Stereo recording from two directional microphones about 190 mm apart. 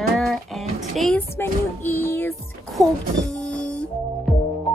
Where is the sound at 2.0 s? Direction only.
10° left (ahead or behind).